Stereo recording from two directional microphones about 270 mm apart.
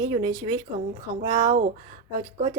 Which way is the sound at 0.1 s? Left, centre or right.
Centre.